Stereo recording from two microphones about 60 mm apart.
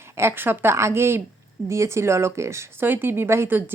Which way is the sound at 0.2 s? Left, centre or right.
Right.